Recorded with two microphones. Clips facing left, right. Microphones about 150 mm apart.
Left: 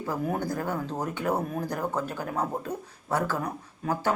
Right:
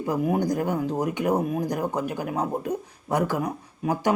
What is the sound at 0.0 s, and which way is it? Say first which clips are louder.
Speech: right 5 dB; 15° right (ahead or behind).